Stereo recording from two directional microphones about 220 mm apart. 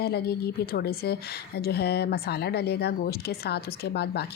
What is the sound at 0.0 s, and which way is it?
Speech, 45° left (ahead or behind).